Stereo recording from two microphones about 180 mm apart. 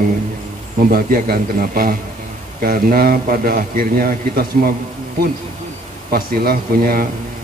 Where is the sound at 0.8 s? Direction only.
55° right (ahead or behind).